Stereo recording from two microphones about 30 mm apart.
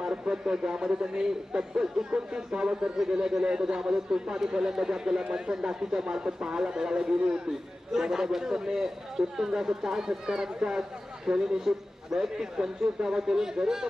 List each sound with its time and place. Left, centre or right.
0.3 s a man's voice: right